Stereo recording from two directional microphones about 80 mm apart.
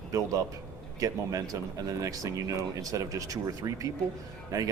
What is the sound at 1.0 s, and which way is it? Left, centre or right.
Speech, right.